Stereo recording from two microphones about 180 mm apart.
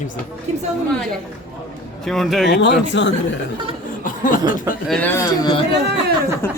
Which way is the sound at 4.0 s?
45° left (ahead or behind).